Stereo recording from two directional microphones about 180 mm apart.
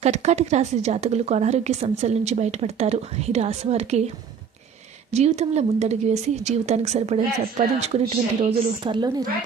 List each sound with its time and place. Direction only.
0.0 s a woman's voice: 40° right (ahead or behind)
5.1 s a woman's voice: 35° right (ahead or behind)